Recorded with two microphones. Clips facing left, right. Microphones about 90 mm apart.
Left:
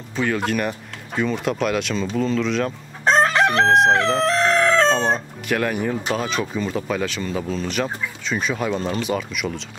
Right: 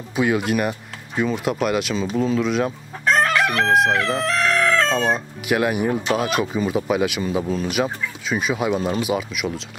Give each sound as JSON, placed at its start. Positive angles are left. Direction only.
{"t": 0.1, "sound": "speech", "side_deg": -10}
{"t": 3.1, "sound": "chicken", "side_deg": 30}
{"t": 4.2, "sound": "fowl", "side_deg": 30}
{"t": 4.9, "sound": "speech", "side_deg": -10}